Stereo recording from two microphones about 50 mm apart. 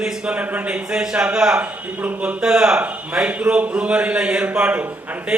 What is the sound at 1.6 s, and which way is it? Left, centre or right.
Speech, right.